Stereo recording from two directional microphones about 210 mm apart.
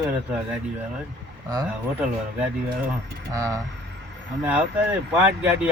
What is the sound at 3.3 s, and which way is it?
Speech, 15° right (ahead or behind).